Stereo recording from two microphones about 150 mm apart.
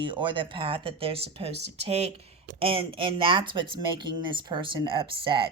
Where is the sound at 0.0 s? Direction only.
30° right (ahead or behind).